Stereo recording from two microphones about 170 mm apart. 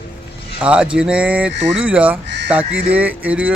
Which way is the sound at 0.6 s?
5° right (ahead or behind).